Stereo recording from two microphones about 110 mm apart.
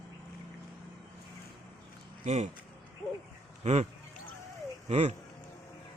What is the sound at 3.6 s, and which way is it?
Speech, 90° right.